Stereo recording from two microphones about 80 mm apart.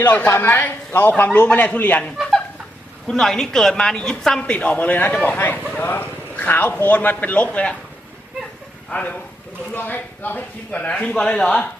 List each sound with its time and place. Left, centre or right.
0.0 s speech: left
3.1 s a woman's voice: centre
8.9 s a woman's voice: centre